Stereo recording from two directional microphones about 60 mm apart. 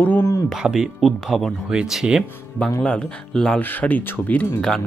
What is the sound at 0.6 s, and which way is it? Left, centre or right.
Speech, centre.